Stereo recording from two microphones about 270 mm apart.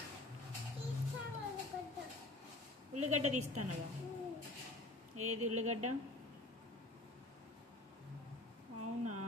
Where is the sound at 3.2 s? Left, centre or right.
Right.